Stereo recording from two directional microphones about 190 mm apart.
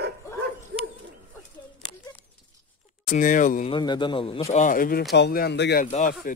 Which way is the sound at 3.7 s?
25° left (ahead or behind).